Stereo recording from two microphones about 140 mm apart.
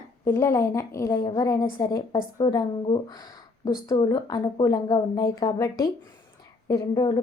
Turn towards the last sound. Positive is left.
turn(degrees=30)  # may be behind; listen again after turning